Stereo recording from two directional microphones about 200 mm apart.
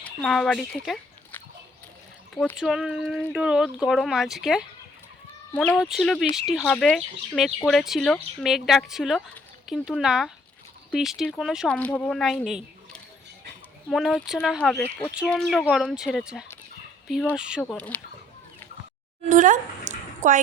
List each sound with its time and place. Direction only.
0.0 s speech: 5° left (ahead or behind)
12.5 s a sound: centre (ahead or behind)
13.9 s speech: centre (ahead or behind)
17.6 s speech: 5° left (ahead or behind)
19.3 s speech: 40° right (ahead or behind)